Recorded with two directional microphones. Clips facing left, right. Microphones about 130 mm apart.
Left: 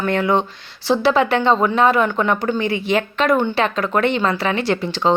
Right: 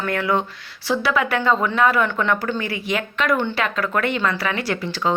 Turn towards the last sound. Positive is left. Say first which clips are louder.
# left 4 dB
turn(degrees=25)  # may be behind; listen again after turning